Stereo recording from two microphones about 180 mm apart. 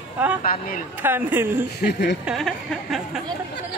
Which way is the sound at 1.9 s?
65° left (ahead or behind).